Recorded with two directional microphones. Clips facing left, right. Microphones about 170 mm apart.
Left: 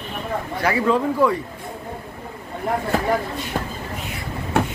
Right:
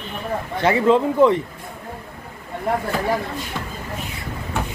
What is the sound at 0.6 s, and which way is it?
Speech, 25° right (ahead or behind).